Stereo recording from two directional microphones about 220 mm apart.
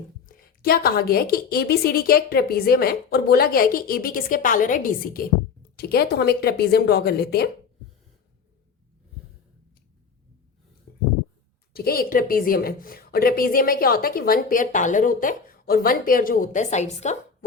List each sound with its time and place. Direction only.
0.3 s a woman's voice: 40° left (ahead or behind)
10.9 s a sound: 45° left (ahead or behind)
11.7 s a woman's voice: 45° left (ahead or behind)